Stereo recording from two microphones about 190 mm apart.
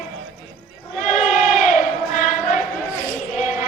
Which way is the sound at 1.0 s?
40° left (ahead or behind).